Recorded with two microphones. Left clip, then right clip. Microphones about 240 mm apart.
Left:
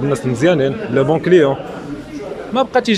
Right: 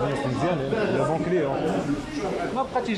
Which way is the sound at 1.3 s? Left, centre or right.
Left.